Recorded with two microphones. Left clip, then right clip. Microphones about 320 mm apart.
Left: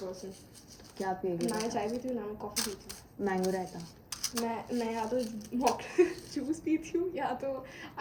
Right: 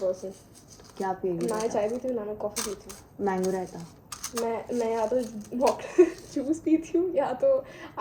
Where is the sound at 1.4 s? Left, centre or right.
Centre.